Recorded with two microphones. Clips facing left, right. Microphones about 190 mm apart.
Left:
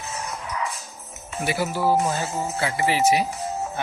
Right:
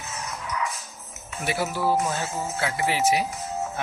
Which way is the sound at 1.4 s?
Centre (ahead or behind).